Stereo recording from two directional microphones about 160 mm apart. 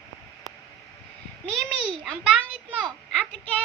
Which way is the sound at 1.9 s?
Centre (ahead or behind).